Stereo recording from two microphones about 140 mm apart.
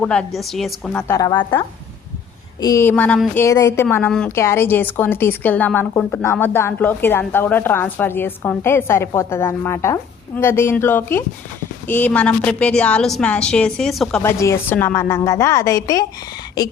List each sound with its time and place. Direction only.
0.0 s a woman's voice: 5° left (ahead or behind)
1.0 s a woman's voice: 25° left (ahead or behind)
2.9 s a woman's voice: 10° left (ahead or behind)
3.3 s a woman's voice: 25° left (ahead or behind); by 14.2 s centre (ahead or behind)
14.2 s a woman's voice: 20° left (ahead or behind)